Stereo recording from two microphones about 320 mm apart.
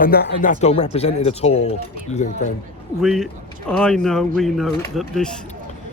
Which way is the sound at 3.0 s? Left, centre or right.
Centre.